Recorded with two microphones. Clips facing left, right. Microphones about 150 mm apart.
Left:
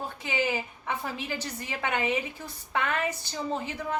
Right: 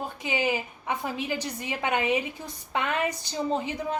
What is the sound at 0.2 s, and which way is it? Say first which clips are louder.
A woman's voice: right 2 dB; 15° right (ahead or behind).